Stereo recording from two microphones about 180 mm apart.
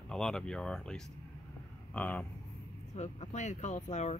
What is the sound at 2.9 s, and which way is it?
Speech, 40° left (ahead or behind).